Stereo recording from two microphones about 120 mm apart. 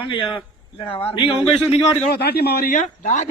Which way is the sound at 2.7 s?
90° left.